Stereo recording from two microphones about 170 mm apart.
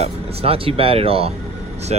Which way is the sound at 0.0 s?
35° right (ahead or behind).